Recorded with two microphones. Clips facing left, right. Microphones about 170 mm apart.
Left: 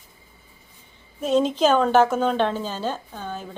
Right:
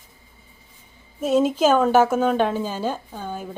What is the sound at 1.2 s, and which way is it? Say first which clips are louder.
Speech: right 1 dB; 5° right (ahead or behind).